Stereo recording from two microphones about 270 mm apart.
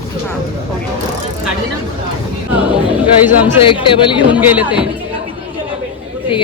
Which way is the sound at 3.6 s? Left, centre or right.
Centre.